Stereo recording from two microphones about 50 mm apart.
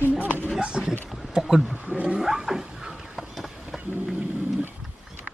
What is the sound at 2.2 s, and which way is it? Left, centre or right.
Cat, centre.